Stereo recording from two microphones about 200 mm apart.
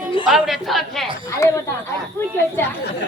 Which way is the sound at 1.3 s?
15° left (ahead or behind).